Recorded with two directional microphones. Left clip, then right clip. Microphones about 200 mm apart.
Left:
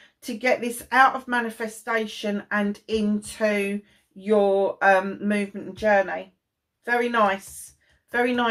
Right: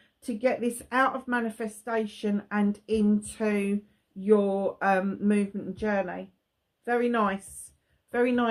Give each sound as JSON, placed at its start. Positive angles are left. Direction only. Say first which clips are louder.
{"t": 0.2, "sound": "speech", "louder": "left 4 dB", "side_deg": -45}